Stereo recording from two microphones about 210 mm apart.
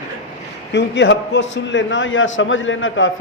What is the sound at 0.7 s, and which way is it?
A man's voice, 55° left (ahead or behind).